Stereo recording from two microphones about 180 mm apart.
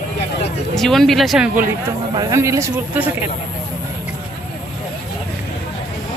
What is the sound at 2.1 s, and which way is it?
Speech, 20° right (ahead or behind).